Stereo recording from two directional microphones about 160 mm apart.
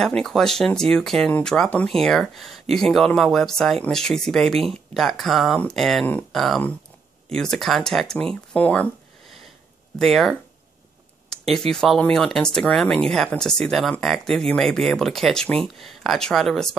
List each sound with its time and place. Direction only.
0.0 s speech: centre (ahead or behind)
9.9 s speech: centre (ahead or behind)
11.5 s speech: 5° left (ahead or behind)